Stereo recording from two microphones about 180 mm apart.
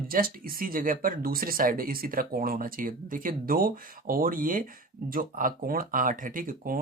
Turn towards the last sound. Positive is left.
turn(degrees=-50)  # may be behind; listen again after turning